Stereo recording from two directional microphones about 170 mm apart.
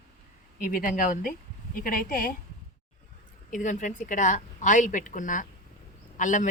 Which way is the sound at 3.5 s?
50° left (ahead or behind).